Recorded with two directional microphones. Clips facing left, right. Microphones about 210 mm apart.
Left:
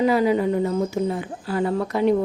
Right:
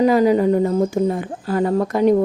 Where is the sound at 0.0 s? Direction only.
40° right (ahead or behind).